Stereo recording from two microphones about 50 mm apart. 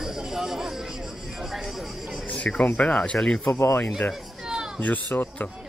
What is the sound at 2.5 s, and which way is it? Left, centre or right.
Speech, left.